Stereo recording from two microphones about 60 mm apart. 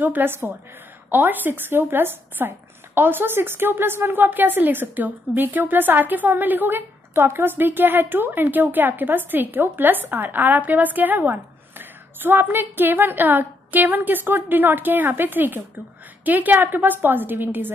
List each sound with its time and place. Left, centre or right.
0.0 s speech: right